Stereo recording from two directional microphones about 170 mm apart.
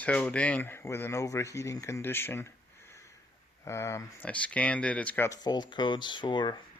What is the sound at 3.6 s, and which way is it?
Speech, 15° left (ahead or behind).